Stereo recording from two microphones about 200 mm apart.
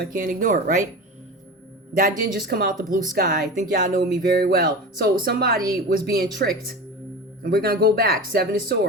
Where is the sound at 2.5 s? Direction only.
50° right (ahead or behind).